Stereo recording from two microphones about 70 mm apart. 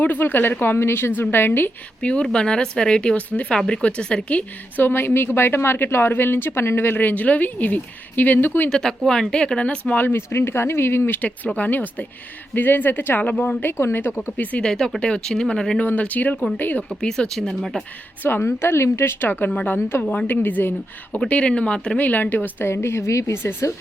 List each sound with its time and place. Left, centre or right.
0.0 s a woman's voice: left
2.0 s speech: centre
4.8 s a woman's voice: left
8.7 s speech: centre
10.1 s a woman's voice: left
14.2 s a woman's voice: centre
14.7 s speech: centre
15.8 s a woman's voice: left
17.0 s speech: centre
18.2 s a woman's voice: left
21.2 s a woman's voice: centre
22.7 s a woman's voice: left